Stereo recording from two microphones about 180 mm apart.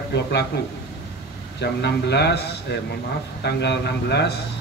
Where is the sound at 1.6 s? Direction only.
70° left (ahead or behind).